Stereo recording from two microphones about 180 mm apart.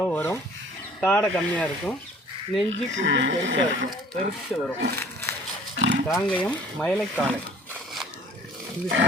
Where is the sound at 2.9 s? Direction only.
85° right.